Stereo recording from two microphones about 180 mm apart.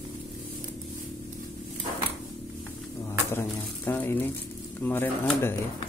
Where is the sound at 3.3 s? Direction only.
10° left (ahead or behind).